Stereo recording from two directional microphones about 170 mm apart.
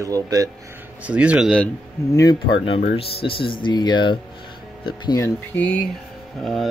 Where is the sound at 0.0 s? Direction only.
20° right (ahead or behind).